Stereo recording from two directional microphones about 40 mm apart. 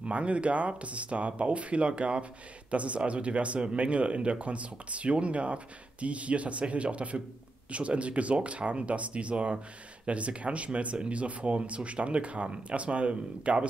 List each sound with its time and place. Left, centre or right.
0.0 s speech: right